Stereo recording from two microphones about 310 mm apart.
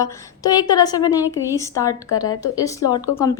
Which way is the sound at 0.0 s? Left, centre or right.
Centre.